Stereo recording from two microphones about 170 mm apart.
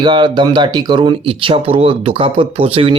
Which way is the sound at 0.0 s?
25° right (ahead or behind).